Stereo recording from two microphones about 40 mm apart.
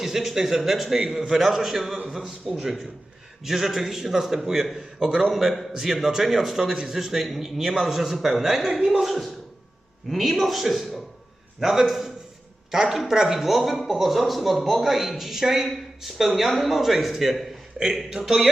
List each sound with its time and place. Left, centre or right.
0.0 s a man's voice: centre
2.2 s a man's voice: centre
6.2 s a man's voice: centre
17.8 s speech: centre
18.3 s a man's voice: centre